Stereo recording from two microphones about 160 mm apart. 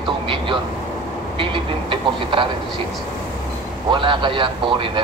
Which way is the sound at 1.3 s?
35° right (ahead or behind).